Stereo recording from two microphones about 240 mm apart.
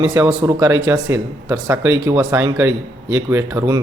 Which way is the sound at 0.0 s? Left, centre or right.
Centre.